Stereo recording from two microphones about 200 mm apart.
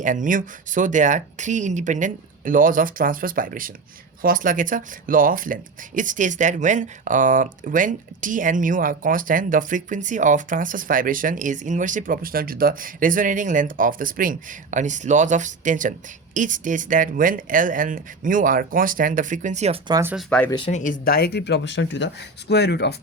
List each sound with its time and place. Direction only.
0.0 s speech: 40° right (ahead or behind)
19.9 s speech: 10° right (ahead or behind)
20.1 s speech: 5° left (ahead or behind)
20.5 s speech: 30° left (ahead or behind); by 23.0 s 55° left (ahead or behind)